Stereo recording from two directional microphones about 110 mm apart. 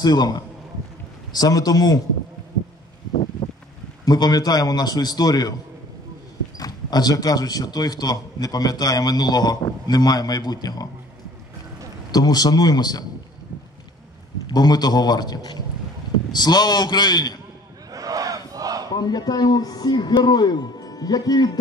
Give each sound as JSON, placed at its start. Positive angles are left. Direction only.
{"t": 0.0, "sound": "speech", "side_deg": 40}
{"t": 4.0, "sound": "speech", "side_deg": 35}
{"t": 6.6, "sound": "speech", "side_deg": 35}
{"t": 12.1, "sound": "speech", "side_deg": 35}
{"t": 14.5, "sound": "speech", "side_deg": 40}
{"t": 17.9, "sound": "battle cry", "side_deg": -30}
{"t": 18.9, "sound": "speech", "side_deg": 40}